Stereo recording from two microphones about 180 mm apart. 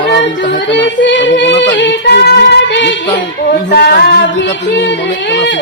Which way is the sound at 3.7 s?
60° left (ahead or behind).